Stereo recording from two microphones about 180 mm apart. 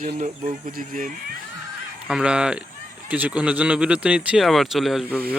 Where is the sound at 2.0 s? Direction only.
5° right (ahead or behind).